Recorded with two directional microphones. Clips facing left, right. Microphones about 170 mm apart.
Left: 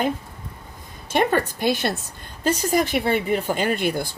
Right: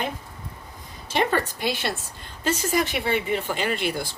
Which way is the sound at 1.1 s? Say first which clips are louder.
Left 3 dB; 50° left (ahead or behind).